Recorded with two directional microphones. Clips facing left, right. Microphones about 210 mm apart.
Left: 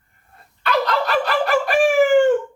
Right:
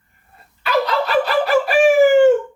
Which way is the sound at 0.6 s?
5° right (ahead or behind).